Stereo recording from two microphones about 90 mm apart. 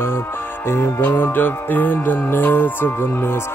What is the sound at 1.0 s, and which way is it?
Music, 20° left (ahead or behind).